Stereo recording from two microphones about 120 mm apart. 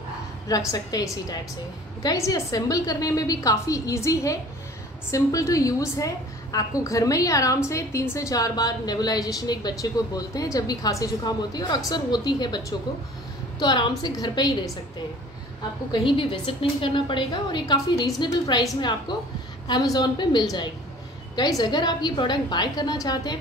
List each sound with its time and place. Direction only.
0.5 s a woman's voice: 30° left (ahead or behind)
15.9 s a woman's voice: 45° left (ahead or behind)